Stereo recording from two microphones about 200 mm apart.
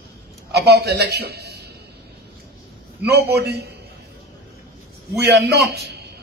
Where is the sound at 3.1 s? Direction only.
55° right (ahead or behind).